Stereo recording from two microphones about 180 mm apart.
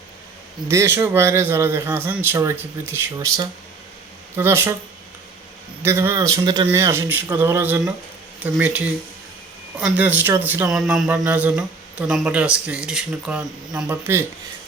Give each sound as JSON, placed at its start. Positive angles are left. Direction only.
{"t": 0.7, "sound": "speech", "side_deg": -15}
{"t": 5.8, "sound": "speech", "side_deg": -15}